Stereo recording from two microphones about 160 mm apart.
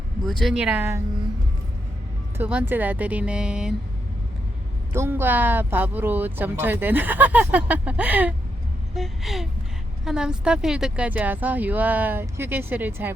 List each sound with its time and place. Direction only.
0.3 s speech: centre (ahead or behind); by 1.0 s 15° right (ahead or behind)
2.4 s speech: 10° right (ahead or behind)
4.9 s speech: 15° right (ahead or behind)